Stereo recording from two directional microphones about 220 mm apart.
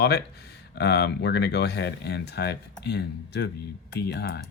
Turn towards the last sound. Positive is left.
turn(degrees=50)  # may be behind; listen again after turning